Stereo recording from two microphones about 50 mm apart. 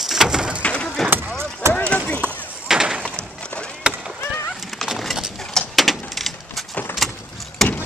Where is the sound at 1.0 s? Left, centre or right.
Right.